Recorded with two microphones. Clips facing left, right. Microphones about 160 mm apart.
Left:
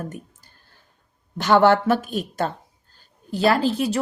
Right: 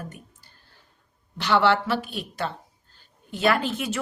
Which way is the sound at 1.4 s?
45° left (ahead or behind).